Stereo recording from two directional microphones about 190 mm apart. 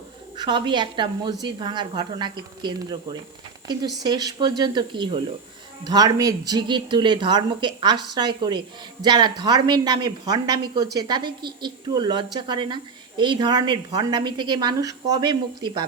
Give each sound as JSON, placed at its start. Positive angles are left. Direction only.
{"t": 0.3, "sound": "a woman's voice", "side_deg": -25}